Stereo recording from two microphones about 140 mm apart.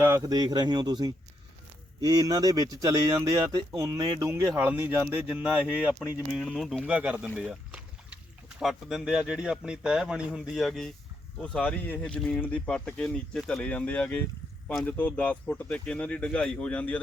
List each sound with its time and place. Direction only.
0.0 s speech: 25° right (ahead or behind); by 17.0 s 10° left (ahead or behind)